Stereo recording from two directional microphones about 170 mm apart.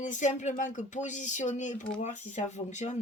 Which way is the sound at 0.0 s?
45° left (ahead or behind).